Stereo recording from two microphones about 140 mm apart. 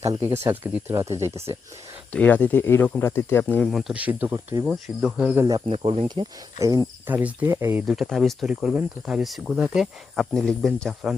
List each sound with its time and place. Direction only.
0.2 s speech: 20° right (ahead or behind)
2.1 s speech: 10° left (ahead or behind)
3.7 s speech: centre (ahead or behind)
5.6 s speech: 45° right (ahead or behind)
6.1 s speech: 25° right (ahead or behind)
7.1 s speech: 10° right (ahead or behind)
7.9 s speech: centre (ahead or behind)